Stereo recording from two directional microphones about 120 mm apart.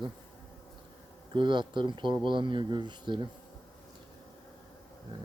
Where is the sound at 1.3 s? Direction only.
40° right (ahead or behind).